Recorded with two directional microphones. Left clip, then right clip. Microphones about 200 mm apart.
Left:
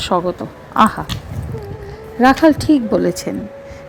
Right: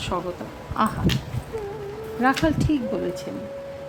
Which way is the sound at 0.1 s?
35° left (ahead or behind).